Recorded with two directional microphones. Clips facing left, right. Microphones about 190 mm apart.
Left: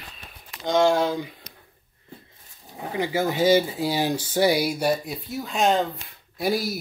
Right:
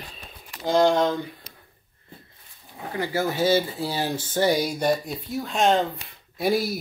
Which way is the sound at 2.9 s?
15° left (ahead or behind).